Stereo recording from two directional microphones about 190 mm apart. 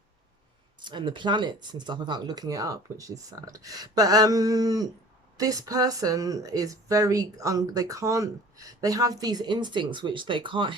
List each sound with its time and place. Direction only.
0.8 s speech: 25° right (ahead or behind)